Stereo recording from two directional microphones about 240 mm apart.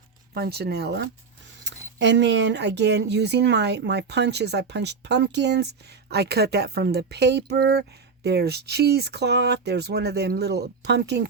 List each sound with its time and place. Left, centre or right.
0.3 s speech: right